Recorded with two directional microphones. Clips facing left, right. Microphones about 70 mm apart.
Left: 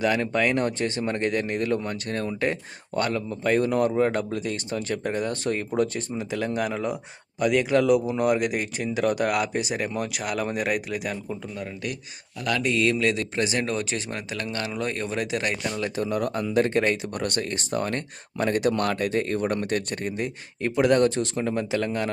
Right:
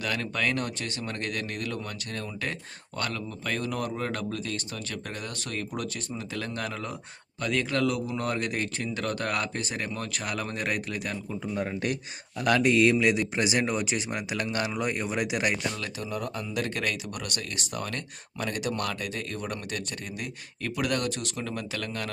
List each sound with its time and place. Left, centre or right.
0.0 s speech: left
6.3 s speech: centre
11.5 s speech: right; by 15.5 s centre
16.0 s speech: left
16.6 s speech: left